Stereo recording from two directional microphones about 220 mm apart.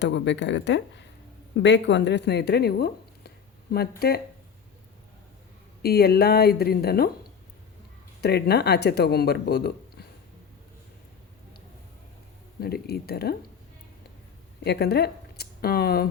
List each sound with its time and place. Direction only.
0.0 s speech: 55° left (ahead or behind)
5.8 s speech: 45° left (ahead or behind)
8.2 s speech: 45° left (ahead or behind)
12.5 s speech: 45° left (ahead or behind)
14.6 s speech: 50° left (ahead or behind)